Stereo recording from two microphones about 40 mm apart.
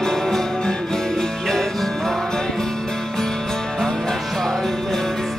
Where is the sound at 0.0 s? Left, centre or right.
Centre.